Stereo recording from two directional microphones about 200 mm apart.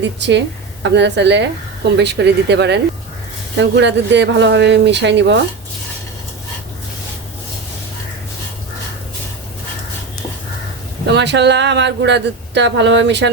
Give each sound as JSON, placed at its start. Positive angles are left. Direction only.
{"t": 0.0, "sound": "a woman's voice", "side_deg": -60}
{"t": 11.0, "sound": "a woman's voice", "side_deg": -60}